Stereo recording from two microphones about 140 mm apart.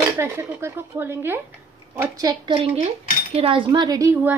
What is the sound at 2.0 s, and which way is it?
A woman's voice, 25° right (ahead or behind).